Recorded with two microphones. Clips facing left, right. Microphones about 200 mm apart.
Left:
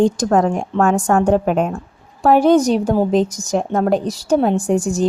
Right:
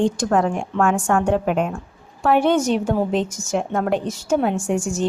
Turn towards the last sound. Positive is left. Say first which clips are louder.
# left 5 dB
turn(degrees=35)  # may be behind; listen again after turning